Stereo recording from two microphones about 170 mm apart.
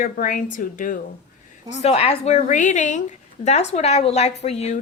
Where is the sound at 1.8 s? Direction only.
35° left (ahead or behind).